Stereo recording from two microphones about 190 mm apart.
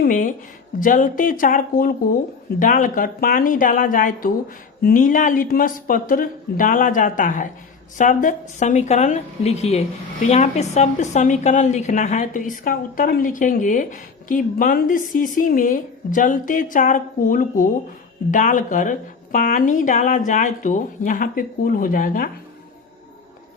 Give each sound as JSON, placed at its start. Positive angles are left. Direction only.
{"t": 0.0, "sound": "speech", "side_deg": 45}